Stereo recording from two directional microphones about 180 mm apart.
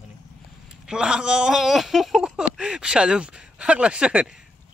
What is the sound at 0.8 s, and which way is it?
Speech, 5° right (ahead or behind).